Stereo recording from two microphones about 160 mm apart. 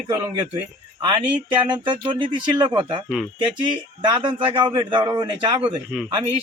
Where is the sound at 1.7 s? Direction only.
30° right (ahead or behind).